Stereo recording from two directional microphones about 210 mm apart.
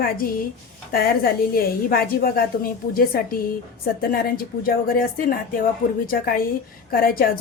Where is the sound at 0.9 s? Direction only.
45° left (ahead or behind).